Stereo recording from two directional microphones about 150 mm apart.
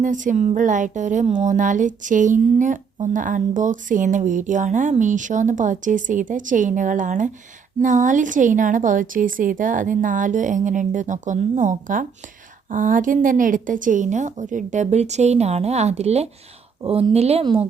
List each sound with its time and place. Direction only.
0.0 s a woman's voice: 60° right (ahead or behind)
17.4 s speech: 30° right (ahead or behind)